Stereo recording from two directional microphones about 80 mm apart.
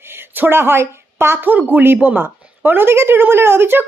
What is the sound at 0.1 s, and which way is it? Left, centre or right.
A woman's voice, right.